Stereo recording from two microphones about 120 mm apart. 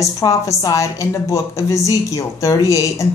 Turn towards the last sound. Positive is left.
turn(degrees=25)  # may be behind; listen again after turning